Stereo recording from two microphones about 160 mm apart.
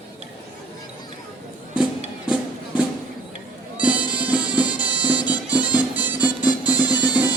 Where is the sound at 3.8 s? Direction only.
10° right (ahead or behind).